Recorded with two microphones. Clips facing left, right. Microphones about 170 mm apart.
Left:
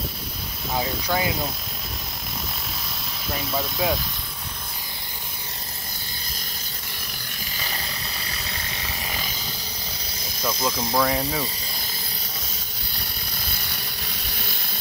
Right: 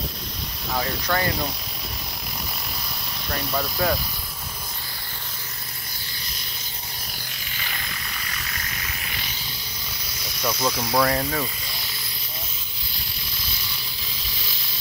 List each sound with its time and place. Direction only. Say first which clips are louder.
0.7 s speech: even; 10° left (ahead or behind)
3.3 s speech: even; 5° left (ahead or behind)
7.5 s a sound: left 2 dB; 35° left (ahead or behind)
10.6 s speech: right 1 dB; 10° right (ahead or behind)
11.1 s speech: right 1 dB; 10° left (ahead or behind)
13.4 s a sound: left 2 dB; 55° left (ahead or behind)